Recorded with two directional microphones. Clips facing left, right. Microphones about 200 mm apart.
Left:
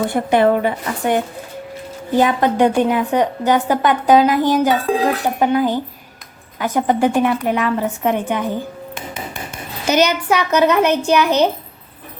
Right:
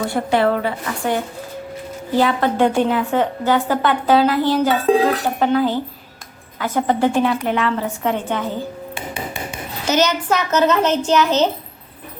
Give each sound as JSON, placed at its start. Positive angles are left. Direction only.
{"t": 0.0, "sound": "a woman's voice", "side_deg": 20}
{"t": 9.8, "sound": "a woman's voice", "side_deg": 10}